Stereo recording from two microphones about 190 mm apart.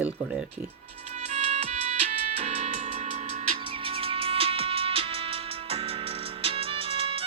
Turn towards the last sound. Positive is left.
turn(degrees=-30)  # may be behind; listen again after turning